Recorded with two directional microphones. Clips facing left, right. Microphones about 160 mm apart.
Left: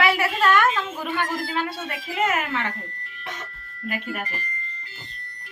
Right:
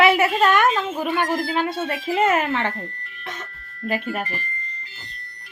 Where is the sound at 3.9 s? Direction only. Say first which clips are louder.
Right 5 dB; 30° right (ahead or behind).